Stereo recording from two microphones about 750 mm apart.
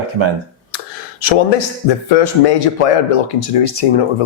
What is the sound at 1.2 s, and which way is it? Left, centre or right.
Speech, left.